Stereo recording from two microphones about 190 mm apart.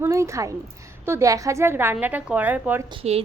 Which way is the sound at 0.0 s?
15° right (ahead or behind).